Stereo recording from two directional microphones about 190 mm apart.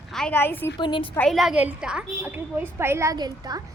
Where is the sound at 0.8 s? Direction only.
25° left (ahead or behind).